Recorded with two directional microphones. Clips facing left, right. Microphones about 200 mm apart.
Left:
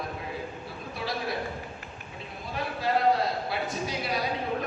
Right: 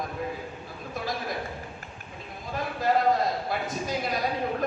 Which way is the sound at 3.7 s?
45° right (ahead or behind).